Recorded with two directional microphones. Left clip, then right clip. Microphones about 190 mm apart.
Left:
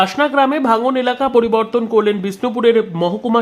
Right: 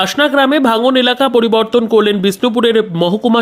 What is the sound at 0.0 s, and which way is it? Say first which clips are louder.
Speech: right 2 dB; 20° right (ahead or behind).